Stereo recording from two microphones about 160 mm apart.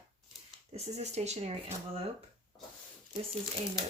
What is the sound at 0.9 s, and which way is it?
Speech, 45° right (ahead or behind).